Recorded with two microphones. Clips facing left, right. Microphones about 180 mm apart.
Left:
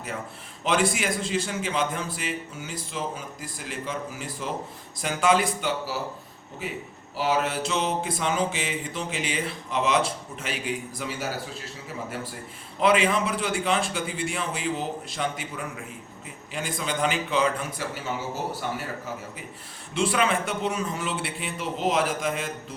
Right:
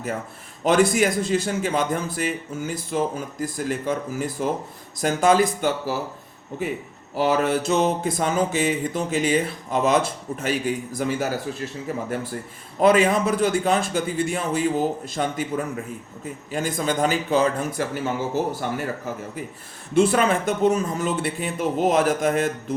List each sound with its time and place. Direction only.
0.6 s a man's voice: 45° right (ahead or behind)
7.2 s a man's voice: 50° right (ahead or behind)
12.8 s a man's voice: 45° right (ahead or behind)
19.9 s a man's voice: 50° right (ahead or behind)